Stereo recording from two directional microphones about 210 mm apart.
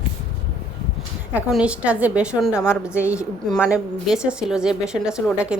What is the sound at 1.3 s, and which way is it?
A woman's voice, 5° right (ahead or behind).